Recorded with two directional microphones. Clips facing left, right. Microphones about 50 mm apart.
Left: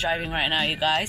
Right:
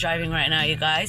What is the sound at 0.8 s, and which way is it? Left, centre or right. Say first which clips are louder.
Speech: left 1 dB; right.